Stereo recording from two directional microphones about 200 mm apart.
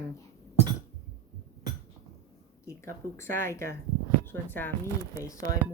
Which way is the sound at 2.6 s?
15° left (ahead or behind).